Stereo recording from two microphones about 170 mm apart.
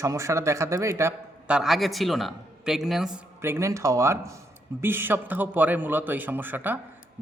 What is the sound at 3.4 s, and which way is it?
Speech, 15° right (ahead or behind).